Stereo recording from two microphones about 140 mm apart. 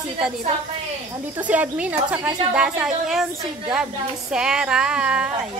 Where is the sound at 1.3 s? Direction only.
10° right (ahead or behind).